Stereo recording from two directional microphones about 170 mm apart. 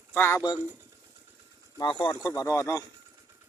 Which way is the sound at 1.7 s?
25° left (ahead or behind).